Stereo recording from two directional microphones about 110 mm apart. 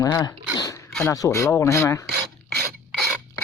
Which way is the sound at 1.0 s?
30° left (ahead or behind).